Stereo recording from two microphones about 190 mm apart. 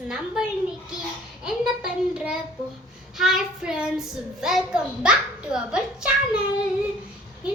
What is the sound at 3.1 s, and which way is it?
A child's voice, centre (ahead or behind).